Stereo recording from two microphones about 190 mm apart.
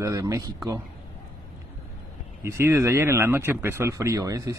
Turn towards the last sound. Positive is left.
turn(degrees=-15)  # may be behind; listen again after turning